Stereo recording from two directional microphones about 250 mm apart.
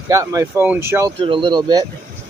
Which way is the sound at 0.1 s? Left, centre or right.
Centre.